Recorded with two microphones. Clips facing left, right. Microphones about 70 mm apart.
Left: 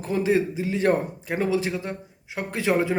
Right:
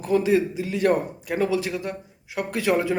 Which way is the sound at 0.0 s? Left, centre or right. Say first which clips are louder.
Right 2 dB; left.